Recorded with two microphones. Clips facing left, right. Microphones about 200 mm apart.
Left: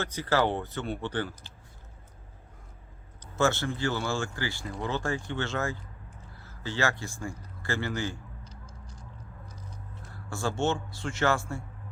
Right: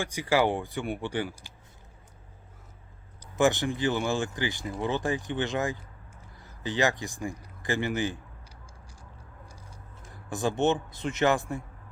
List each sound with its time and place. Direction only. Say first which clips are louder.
0.0 s speech: right 2 dB; 10° right (ahead or behind)
3.3 s speech: right 3 dB; 15° right (ahead or behind)
6.4 s a sound: right 3 dB; 15° right (ahead or behind)
10.1 s speech: right 3 dB; 20° right (ahead or behind)